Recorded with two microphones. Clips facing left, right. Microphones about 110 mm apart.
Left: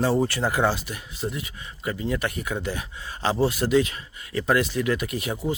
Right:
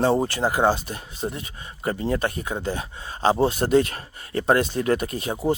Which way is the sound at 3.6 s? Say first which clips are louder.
Right 2 dB; 50° right (ahead or behind).